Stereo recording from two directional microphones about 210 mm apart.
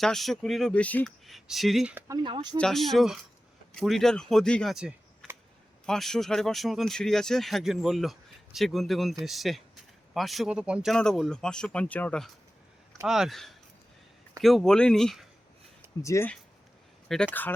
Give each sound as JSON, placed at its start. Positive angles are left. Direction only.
{"t": 0.0, "sound": "speech", "side_deg": 0}
{"t": 2.0, "sound": "speech", "side_deg": -20}
{"t": 2.6, "sound": "speech", "side_deg": 0}
{"t": 16.0, "sound": "speech", "side_deg": 15}